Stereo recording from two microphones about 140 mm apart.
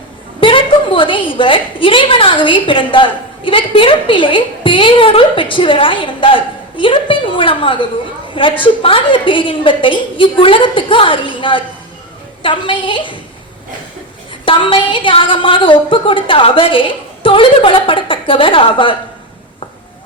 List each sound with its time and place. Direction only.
0.3 s a woman's voice: 40° left (ahead or behind)
14.4 s a woman's voice: 40° left (ahead or behind)